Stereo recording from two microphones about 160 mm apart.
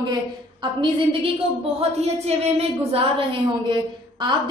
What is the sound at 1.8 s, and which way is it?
A woman's voice, 40° right (ahead or behind).